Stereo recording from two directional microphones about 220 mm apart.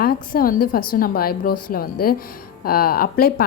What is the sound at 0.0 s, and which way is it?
A woman's voice, 40° left (ahead or behind).